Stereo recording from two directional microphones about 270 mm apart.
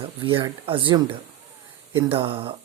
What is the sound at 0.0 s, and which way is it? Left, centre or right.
Speech, centre.